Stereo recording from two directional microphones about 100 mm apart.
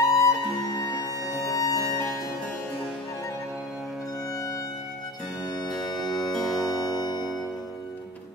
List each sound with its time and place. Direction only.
0.0 s music: 30° left (ahead or behind)
5.7 s music: centre (ahead or behind)